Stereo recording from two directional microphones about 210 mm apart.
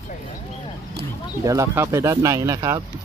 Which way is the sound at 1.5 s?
15° right (ahead or behind).